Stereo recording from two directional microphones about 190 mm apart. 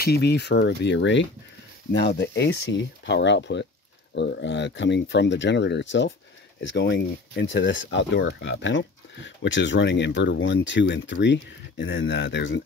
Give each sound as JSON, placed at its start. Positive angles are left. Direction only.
{"t": 0.0, "sound": "speech", "side_deg": 60}